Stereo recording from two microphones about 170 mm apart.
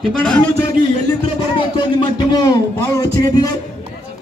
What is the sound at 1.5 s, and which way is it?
A man's voice, 30° left (ahead or behind).